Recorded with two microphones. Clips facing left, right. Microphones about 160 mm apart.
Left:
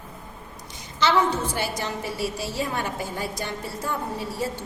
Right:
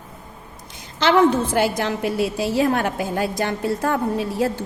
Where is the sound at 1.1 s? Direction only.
55° right (ahead or behind).